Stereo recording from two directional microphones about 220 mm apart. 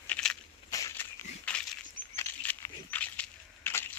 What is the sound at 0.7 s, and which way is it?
Crushing, 10° left (ahead or behind).